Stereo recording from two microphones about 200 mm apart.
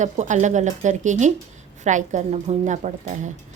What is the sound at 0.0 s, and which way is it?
Speech, 35° right (ahead or behind).